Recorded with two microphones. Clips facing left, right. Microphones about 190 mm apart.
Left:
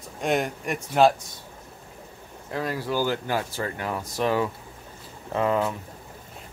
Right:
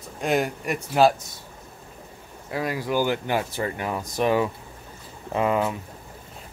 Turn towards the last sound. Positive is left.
turn(degrees=-10)  # may be behind; listen again after turning